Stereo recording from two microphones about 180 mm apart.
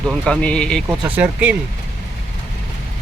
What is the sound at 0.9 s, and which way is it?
Speech, 10° right (ahead or behind).